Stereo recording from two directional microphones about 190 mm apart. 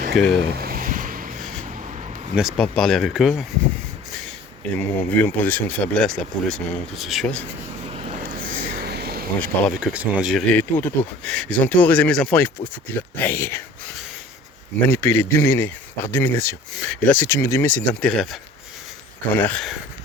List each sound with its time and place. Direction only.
0.1 s speech: centre (ahead or behind)
0.5 s vehicle: 50° right (ahead or behind)
2.3 s speech: centre (ahead or behind)
4.8 s speech: 10° left (ahead or behind)
7.9 s vehicle: 35° right (ahead or behind)
8.4 s a sound: 55° right (ahead or behind)
9.4 s speech: 5° left (ahead or behind)
10.5 s speech: 10° left (ahead or behind)
14.8 s speech: 10° left (ahead or behind)